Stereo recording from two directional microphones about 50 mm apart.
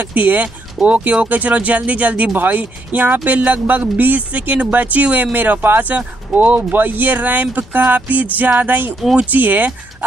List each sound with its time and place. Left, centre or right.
0.0 s speech: right